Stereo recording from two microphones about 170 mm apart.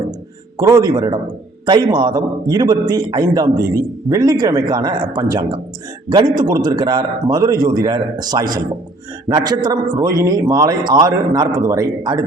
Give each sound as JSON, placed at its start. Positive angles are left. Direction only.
{"t": 0.5, "sound": "a man's voice", "side_deg": -20}